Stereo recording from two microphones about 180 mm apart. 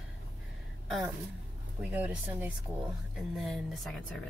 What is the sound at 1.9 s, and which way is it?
Speech, 10° right (ahead or behind).